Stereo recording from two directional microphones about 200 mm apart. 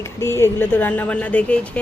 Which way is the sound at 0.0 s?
15° left (ahead or behind).